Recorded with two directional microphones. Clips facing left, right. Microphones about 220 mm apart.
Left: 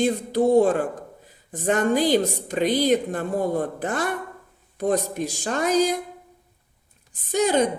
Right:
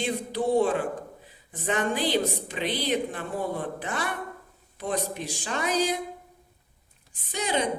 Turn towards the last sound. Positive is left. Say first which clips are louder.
# left 8 dB
turn(degrees=45)  # may be behind; listen again after turning